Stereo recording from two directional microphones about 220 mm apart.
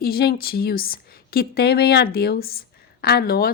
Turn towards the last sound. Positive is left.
turn(degrees=45)  # may be behind; listen again after turning